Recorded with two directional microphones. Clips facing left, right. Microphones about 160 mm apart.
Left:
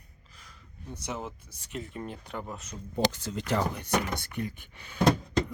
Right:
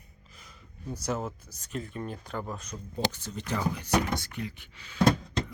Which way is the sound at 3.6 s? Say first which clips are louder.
Right 3 dB; 55° left (ahead or behind).